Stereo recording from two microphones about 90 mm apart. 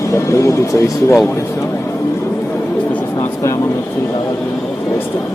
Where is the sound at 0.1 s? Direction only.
35° left (ahead or behind).